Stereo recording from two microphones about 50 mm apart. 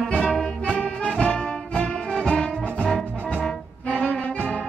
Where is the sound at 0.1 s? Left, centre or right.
Centre.